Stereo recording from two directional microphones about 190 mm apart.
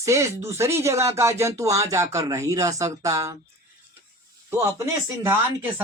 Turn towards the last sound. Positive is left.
turn(degrees=-10)  # may be behind; listen again after turning